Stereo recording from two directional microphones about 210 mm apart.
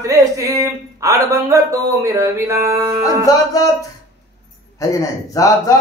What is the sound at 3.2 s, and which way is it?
Speech, 15° left (ahead or behind).